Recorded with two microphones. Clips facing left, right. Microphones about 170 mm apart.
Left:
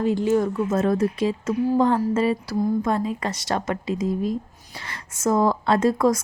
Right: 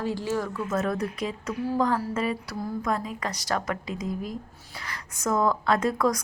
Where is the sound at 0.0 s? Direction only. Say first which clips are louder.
Left 8 dB; 20° left (ahead or behind).